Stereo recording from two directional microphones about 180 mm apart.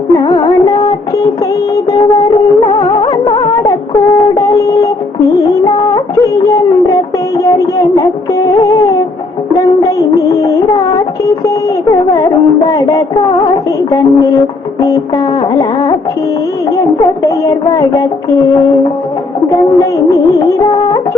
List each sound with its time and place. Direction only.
0.1 s music: 20° left (ahead or behind)
5.9 s music: 20° left (ahead or behind)
9.6 s music of bollywood: 20° left (ahead or behind)
13.9 s music: 20° left (ahead or behind)
17.2 s music: 20° left (ahead or behind)